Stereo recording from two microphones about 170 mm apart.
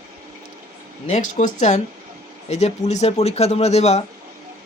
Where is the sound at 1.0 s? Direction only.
45° left (ahead or behind).